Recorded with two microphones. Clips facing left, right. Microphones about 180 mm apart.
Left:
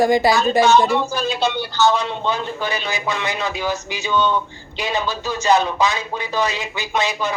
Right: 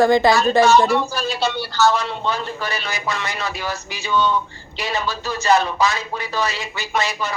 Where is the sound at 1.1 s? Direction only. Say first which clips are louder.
Left 2 dB; 5° right (ahead or behind).